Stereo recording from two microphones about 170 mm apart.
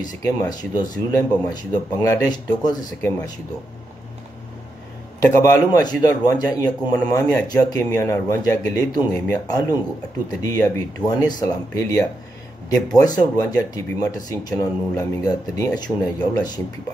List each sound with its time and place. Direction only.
0.0 s a man's voice: 20° left (ahead or behind)
5.2 s a man's voice: 20° left (ahead or behind)